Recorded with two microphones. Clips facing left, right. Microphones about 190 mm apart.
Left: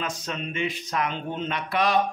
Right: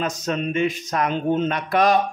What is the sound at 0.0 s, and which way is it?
A man's voice, 45° right (ahead or behind).